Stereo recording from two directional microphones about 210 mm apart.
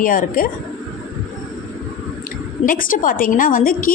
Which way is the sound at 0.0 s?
40° left (ahead or behind).